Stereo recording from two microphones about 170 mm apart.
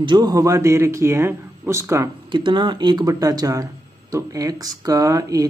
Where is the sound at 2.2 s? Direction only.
30° right (ahead or behind).